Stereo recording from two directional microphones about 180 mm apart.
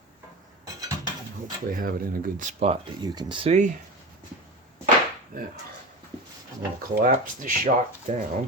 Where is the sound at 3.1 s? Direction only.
25° right (ahead or behind).